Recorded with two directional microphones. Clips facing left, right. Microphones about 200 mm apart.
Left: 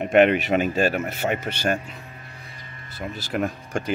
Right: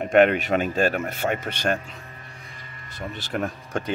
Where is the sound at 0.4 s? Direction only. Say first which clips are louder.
Left 1 dB; 5° left (ahead or behind).